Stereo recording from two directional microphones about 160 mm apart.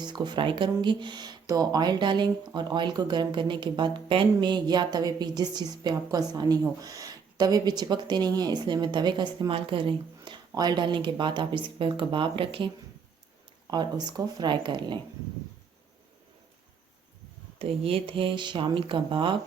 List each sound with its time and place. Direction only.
0.0 s speech: 25° right (ahead or behind)
17.6 s speech: 35° right (ahead or behind)